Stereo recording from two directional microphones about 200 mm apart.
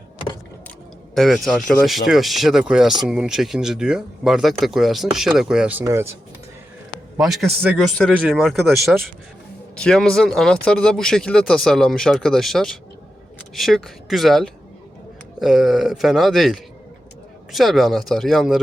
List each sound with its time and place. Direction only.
1.1 s speech: centre (ahead or behind)
7.2 s speech: centre (ahead or behind)